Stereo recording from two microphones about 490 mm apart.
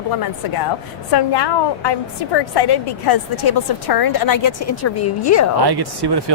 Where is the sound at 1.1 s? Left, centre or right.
Left.